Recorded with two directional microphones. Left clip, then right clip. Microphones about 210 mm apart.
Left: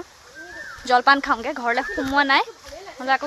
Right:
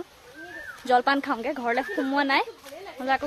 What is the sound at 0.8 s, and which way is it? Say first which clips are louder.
Speech: left 5 dB; 5° right (ahead or behind).